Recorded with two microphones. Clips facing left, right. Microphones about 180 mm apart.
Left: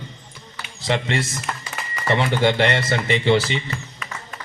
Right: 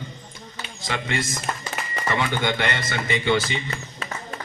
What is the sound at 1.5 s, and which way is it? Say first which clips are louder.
Music: even; 25° right (ahead or behind).